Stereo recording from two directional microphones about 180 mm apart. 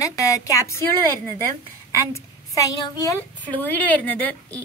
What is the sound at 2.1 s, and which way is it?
A woman's voice, 20° left (ahead or behind).